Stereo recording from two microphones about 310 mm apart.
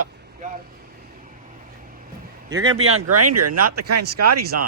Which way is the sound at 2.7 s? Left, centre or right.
Right.